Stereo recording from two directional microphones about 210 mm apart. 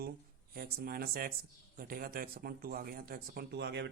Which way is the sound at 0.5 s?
45° right (ahead or behind).